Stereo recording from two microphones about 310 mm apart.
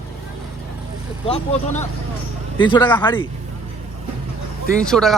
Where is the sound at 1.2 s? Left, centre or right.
Centre.